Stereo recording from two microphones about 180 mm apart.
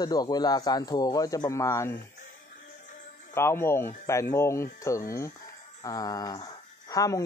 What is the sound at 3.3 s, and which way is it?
A man's voice, 15° left (ahead or behind).